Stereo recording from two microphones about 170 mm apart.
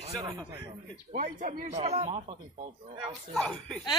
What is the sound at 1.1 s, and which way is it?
Speech, 50° right (ahead or behind).